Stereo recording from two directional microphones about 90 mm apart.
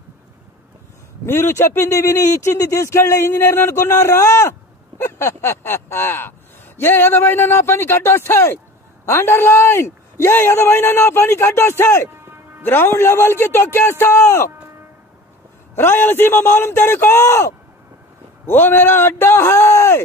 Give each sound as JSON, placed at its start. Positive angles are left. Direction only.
{"t": 1.2, "sound": "a man's voice", "side_deg": 25}
{"t": 15.7, "sound": "a man's voice", "side_deg": 25}
{"t": 18.5, "sound": "a man's voice", "side_deg": 25}